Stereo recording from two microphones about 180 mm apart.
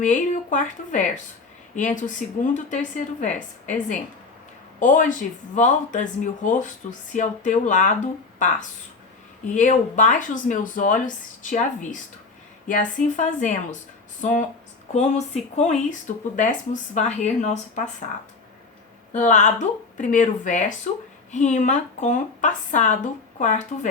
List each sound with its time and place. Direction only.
0.0 s a woman's voice: 45° left (ahead or behind)
9.6 s a woman's voice: 45° left (ahead or behind)
19.1 s a woman's voice: 45° left (ahead or behind)